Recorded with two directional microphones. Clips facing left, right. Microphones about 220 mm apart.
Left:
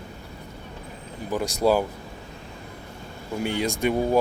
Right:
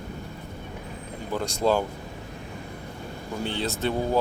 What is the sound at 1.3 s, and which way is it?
Speech, 10° left (ahead or behind).